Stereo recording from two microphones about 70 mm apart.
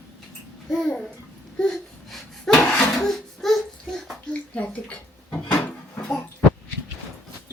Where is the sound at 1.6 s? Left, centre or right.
Centre.